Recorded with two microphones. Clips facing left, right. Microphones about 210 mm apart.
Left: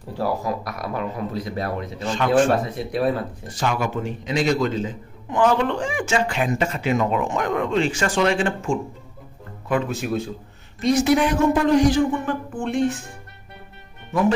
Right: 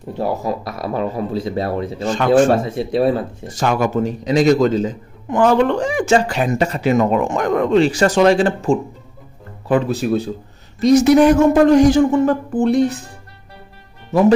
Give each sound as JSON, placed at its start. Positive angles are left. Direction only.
{"t": 0.2, "sound": "speech", "side_deg": -25}
{"t": 2.1, "sound": "speech", "side_deg": -45}
{"t": 2.7, "sound": "speech", "side_deg": -25}
{"t": 3.5, "sound": "a man's voice", "side_deg": -45}